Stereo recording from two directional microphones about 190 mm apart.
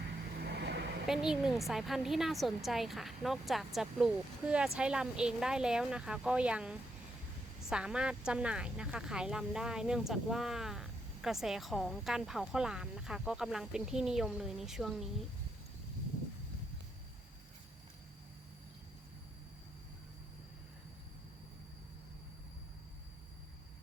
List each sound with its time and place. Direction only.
0.4 s vehicle: 60° right (ahead or behind)
1.0 s speech: 5° right (ahead or behind)